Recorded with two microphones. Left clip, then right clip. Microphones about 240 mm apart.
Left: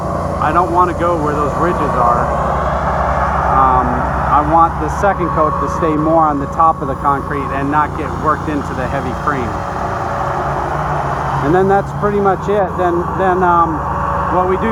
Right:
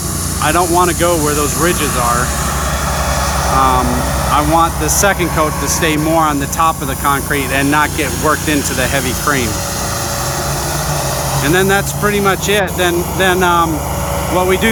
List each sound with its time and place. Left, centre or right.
0.6 s speech: centre
3.5 s vehicle: right
4.4 s speech: centre
11.5 s speech: right